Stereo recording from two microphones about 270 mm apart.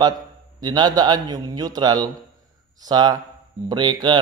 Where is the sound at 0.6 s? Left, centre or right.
Centre.